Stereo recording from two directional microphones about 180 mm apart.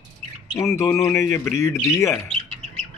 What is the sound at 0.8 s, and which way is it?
Speech, 15° left (ahead or behind).